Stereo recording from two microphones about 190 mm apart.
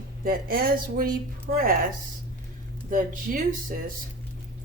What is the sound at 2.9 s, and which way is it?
Speech, 45° right (ahead or behind).